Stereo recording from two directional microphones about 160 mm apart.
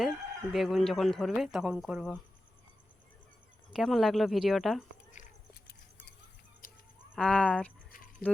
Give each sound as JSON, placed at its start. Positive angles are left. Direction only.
{"t": 0.0, "sound": "speech", "side_deg": 0}
{"t": 3.7, "sound": "speech", "side_deg": 0}
{"t": 5.2, "sound": "a sound", "side_deg": 50}
{"t": 6.6, "sound": "fowl", "side_deg": 60}
{"t": 7.2, "sound": "speech", "side_deg": 5}